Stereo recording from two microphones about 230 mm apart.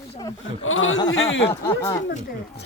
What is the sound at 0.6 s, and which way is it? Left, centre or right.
Speech, left.